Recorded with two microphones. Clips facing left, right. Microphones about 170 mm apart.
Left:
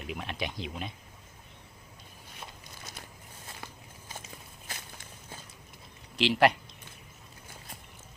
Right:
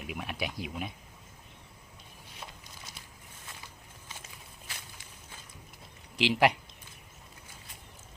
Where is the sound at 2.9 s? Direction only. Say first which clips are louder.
Left 4 dB; 45° left (ahead or behind).